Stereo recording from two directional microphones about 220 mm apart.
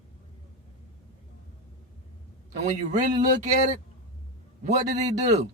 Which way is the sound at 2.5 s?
35° right (ahead or behind).